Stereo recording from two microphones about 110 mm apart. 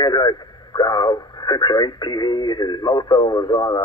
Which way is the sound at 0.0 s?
40° left (ahead or behind).